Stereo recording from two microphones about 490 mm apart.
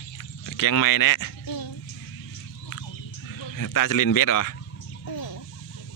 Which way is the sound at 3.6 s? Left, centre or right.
Left.